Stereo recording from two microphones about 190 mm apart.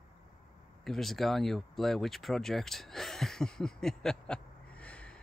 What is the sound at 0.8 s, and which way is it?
Speech, centre (ahead or behind).